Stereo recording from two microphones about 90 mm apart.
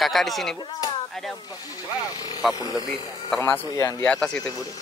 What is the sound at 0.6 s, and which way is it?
Speech, 50° left (ahead or behind).